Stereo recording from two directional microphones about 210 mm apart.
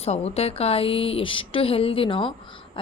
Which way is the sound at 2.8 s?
25° left (ahead or behind).